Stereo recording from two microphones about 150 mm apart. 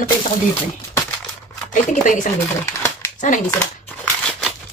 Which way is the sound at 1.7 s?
55° left (ahead or behind).